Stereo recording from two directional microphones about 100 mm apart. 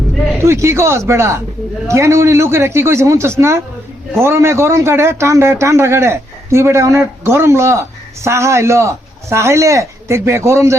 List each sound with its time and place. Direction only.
0.4 s a man's voice: 30° right (ahead or behind)